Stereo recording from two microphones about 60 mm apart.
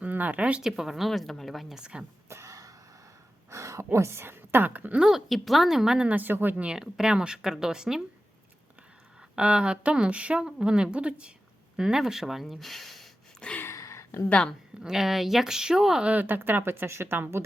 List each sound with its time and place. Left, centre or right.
0.0 s speech: right
0.6 s speech: centre
1.7 s speech: centre
2.3 s a sound: right
3.9 s a woman's voice: right
4.9 s speech: centre
6.1 s speech: right
6.7 s speech: centre
9.3 s speech: centre
13.4 s a sound: centre
13.7 s a sound: left
14.3 s a woman's voice: centre
14.8 s speech: centre
16.2 s speech: right